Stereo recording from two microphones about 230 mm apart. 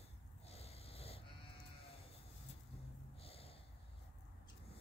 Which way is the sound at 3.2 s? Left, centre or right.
Left.